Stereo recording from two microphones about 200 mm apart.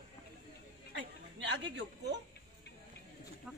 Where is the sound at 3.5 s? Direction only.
5° right (ahead or behind).